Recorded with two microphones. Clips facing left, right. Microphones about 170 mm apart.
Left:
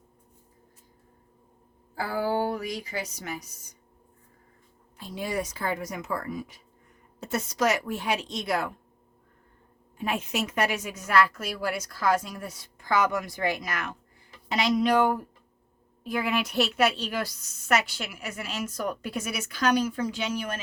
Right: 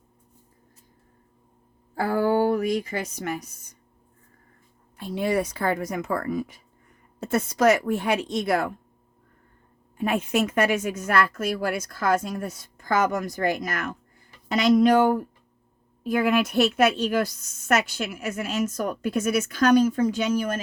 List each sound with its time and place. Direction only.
2.0 s a woman's voice: 55° right (ahead or behind)
4.9 s a woman's voice: 60° right (ahead or behind)
10.0 s a woman's voice: 55° right (ahead or behind)
16.0 s a woman's voice: 50° right (ahead or behind)